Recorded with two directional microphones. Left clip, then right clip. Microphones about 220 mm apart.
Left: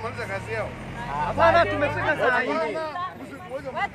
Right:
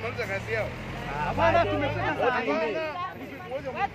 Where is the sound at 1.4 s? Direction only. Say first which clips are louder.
Left 5 dB; 40° left (ahead or behind).